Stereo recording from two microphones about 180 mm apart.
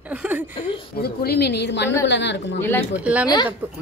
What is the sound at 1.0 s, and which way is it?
A woman's voice, 60° left (ahead or behind).